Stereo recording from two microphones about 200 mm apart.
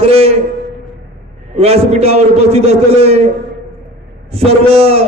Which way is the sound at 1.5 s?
30° right (ahead or behind).